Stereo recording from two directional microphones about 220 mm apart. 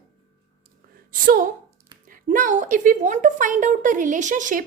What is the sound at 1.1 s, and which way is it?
Speech, 40° right (ahead or behind).